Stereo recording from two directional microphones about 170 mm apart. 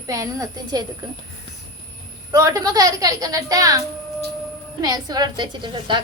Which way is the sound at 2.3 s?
20° right (ahead or behind).